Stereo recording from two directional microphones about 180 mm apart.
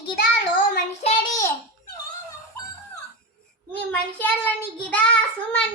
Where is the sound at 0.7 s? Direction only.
35° left (ahead or behind).